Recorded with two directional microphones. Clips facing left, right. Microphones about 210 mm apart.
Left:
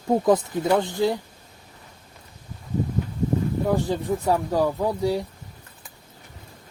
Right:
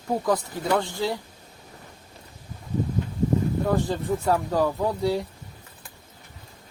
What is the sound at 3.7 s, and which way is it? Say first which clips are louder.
Speech: left 3 dB; 15° left (ahead or behind).